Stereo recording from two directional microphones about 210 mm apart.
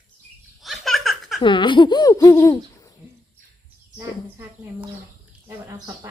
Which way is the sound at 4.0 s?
15° right (ahead or behind).